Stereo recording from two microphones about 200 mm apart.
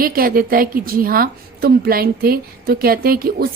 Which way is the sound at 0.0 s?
45° right (ahead or behind).